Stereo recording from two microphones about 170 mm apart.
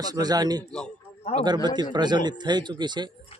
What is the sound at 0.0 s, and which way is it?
Speech, 25° right (ahead or behind).